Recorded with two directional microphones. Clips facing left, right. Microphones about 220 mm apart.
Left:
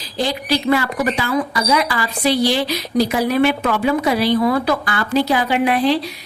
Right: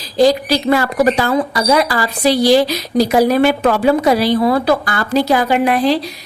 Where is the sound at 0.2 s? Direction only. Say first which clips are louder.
Right 8 dB; 40° right (ahead or behind).